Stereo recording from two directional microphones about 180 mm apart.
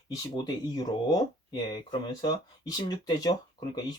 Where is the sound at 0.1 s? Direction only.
20° left (ahead or behind).